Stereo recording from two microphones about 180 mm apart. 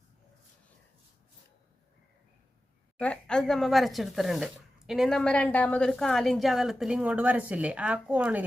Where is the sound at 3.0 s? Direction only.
5° left (ahead or behind).